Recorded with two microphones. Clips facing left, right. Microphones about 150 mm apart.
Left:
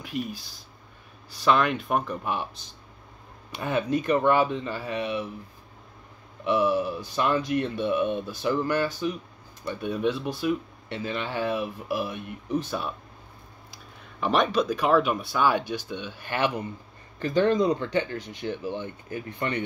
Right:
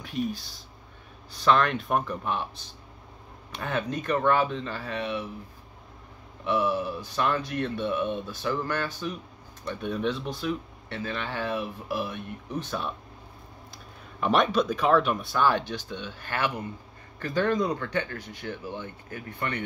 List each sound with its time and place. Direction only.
0.0 s speech: 5° left (ahead or behind)
6.4 s speech: 15° left (ahead or behind)
14.2 s speech: centre (ahead or behind); by 19.6 s 20° left (ahead or behind)